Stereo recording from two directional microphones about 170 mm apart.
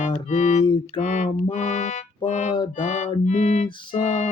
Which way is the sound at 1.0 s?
45° left (ahead or behind).